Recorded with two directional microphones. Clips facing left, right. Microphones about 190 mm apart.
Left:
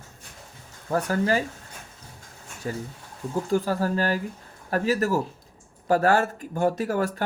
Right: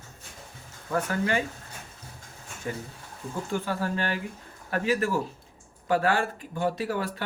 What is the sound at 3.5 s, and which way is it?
Speech, 40° left (ahead or behind).